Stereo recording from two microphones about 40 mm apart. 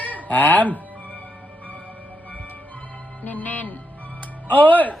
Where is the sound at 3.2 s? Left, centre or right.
Left.